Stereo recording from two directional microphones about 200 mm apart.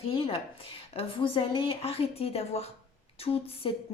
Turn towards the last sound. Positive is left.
turn(degrees=30)  # may be behind; listen again after turning